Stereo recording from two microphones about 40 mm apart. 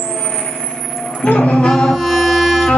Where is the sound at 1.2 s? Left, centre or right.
Left.